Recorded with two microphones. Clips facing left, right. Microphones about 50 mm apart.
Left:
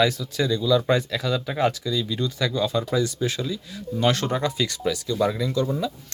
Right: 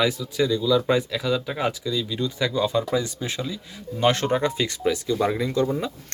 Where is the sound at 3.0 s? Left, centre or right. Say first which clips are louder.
Left 3 dB; right.